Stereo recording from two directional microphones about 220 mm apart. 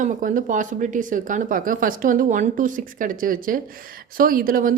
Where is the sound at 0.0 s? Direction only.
35° right (ahead or behind).